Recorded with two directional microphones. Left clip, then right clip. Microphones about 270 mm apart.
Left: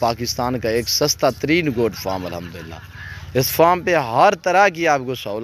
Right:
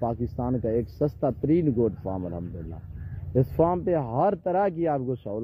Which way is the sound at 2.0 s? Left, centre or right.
Centre.